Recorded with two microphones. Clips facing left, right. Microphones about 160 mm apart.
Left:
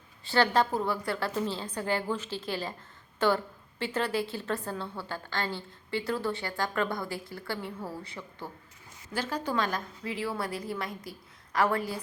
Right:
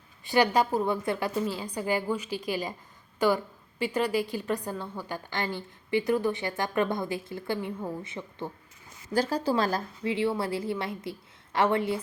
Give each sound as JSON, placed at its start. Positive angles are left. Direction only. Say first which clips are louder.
{"t": 0.3, "sound": "a woman's voice", "louder": "right 2 dB", "side_deg": -15}
{"t": 9.1, "sound": "a woman's voice", "louder": "right 5 dB", "side_deg": -35}